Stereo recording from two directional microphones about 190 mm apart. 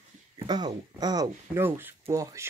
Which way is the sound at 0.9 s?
20° right (ahead or behind).